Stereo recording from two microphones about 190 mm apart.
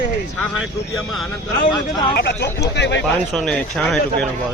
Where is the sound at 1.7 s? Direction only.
25° left (ahead or behind).